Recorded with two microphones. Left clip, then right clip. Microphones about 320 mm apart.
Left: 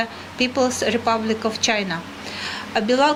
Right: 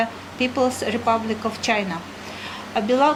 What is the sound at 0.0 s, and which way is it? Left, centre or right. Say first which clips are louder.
A woman's voice: even; left.